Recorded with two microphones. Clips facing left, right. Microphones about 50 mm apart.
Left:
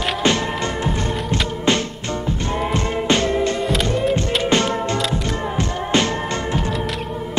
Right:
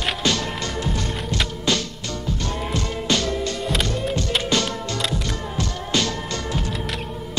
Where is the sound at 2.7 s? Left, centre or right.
Left.